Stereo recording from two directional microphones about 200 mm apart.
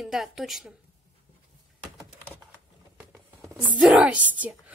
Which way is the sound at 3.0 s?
5° right (ahead or behind).